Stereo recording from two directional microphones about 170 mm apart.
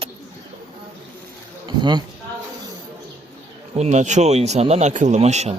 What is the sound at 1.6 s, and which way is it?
Speech, 25° right (ahead or behind).